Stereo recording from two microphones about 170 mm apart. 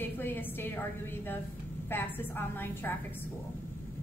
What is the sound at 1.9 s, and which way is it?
A woman's voice, 10° left (ahead or behind).